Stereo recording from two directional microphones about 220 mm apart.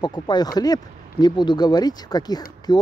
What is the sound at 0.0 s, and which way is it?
Speech, 20° left (ahead or behind).